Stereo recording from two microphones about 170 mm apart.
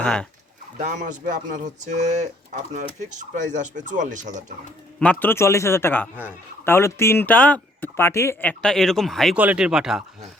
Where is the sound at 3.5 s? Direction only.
45° right (ahead or behind).